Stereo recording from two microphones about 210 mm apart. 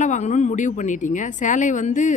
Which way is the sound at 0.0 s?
35° left (ahead or behind).